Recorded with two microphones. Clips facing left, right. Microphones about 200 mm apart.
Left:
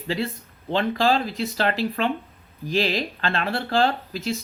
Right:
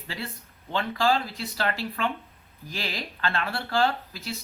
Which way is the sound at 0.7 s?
20° left (ahead or behind).